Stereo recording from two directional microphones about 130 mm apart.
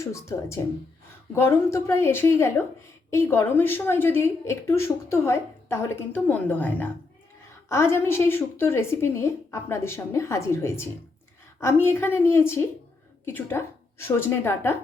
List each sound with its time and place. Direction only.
0.0 s a woman's voice: 20° left (ahead or behind)